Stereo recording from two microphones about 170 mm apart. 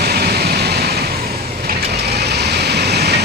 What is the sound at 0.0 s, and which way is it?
Vehicle, 70° right (ahead or behind).